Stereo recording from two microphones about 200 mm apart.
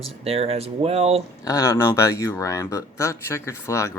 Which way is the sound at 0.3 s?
30° right (ahead or behind).